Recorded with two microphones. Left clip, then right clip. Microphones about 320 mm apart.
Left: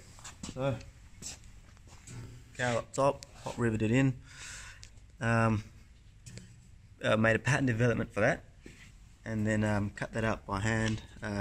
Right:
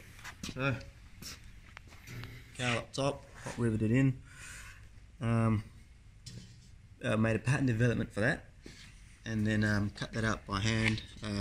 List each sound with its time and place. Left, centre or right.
0.4 s a sound: centre
2.5 s speech: centre
3.4 s speech: left
7.0 s speech: left